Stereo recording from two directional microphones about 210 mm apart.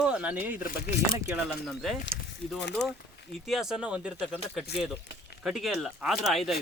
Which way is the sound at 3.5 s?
Centre (ahead or behind).